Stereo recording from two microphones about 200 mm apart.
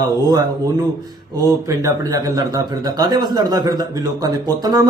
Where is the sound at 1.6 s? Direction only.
15° right (ahead or behind).